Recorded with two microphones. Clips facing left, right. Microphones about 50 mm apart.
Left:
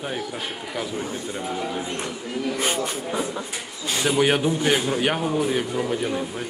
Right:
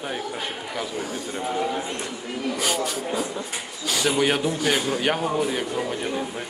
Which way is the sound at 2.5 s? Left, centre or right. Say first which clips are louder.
Even; left.